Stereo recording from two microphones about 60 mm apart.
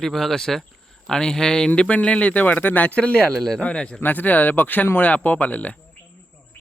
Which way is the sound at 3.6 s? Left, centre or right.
Centre.